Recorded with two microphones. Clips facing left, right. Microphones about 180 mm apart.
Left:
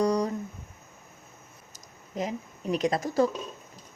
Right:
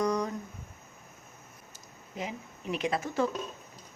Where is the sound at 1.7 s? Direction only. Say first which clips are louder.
Left 7 dB; 40° left (ahead or behind).